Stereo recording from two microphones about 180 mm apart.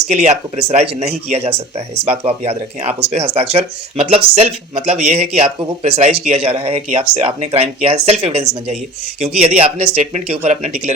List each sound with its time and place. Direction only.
0.2 s speech: 40° right (ahead or behind)